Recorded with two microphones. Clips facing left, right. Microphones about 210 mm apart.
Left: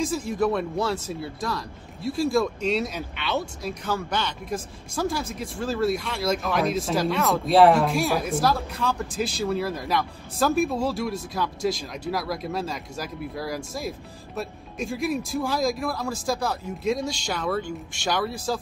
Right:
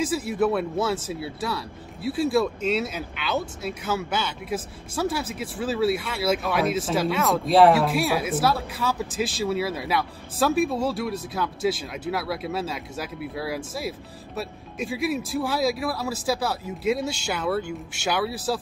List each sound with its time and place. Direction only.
0.0 s speech: 5° right (ahead or behind)